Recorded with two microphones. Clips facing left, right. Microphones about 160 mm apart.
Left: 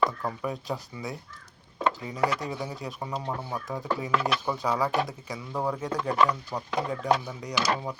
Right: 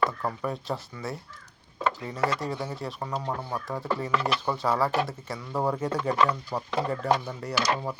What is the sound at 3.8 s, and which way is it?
Chopping, 15° left (ahead or behind).